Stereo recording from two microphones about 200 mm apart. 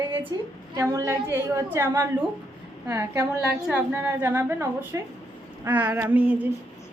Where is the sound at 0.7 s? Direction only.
15° right (ahead or behind).